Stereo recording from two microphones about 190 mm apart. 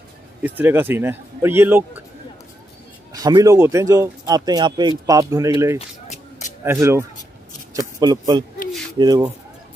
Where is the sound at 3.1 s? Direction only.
20° right (ahead or behind).